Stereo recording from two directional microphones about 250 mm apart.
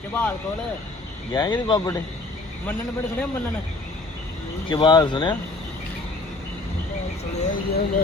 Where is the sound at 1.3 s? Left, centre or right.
Centre.